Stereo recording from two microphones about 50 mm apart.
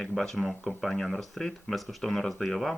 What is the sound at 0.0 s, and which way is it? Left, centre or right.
Speech, centre.